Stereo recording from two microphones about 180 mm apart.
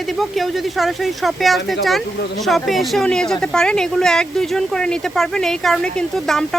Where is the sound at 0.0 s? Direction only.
Centre (ahead or behind).